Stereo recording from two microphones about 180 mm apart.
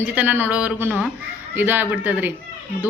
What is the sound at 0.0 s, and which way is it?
A woman's voice, 10° right (ahead or behind).